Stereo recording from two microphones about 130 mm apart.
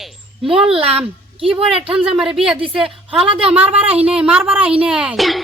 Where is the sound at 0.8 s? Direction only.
50° right (ahead or behind).